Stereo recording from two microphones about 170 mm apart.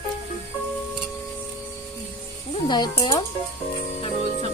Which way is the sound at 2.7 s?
25° left (ahead or behind).